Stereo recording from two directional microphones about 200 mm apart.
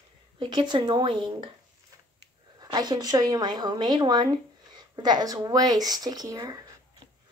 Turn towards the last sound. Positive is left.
turn(degrees=-20)  # may be behind; listen again after turning